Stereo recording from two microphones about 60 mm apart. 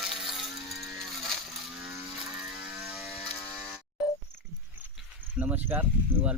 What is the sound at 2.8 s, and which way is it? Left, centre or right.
Mechanisms, centre.